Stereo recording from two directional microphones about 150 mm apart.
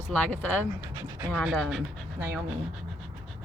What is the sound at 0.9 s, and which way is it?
Speech, 25° right (ahead or behind).